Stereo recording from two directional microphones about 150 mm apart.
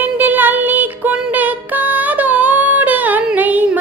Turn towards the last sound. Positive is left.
turn(degrees=-10)  # may be behind; listen again after turning